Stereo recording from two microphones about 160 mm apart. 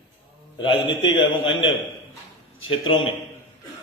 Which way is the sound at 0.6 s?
35° left (ahead or behind).